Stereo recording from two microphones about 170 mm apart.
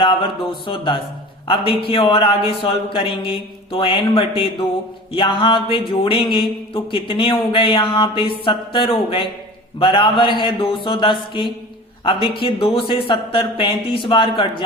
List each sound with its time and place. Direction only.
0.0 s a man's voice: 30° left (ahead or behind)